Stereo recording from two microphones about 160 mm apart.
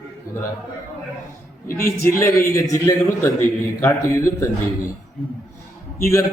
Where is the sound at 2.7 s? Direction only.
20° left (ahead or behind).